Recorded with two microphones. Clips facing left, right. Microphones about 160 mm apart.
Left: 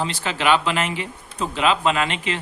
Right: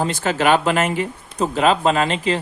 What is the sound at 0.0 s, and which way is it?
Speech, 45° right (ahead or behind).